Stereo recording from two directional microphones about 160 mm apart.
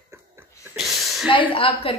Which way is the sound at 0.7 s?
Centre (ahead or behind).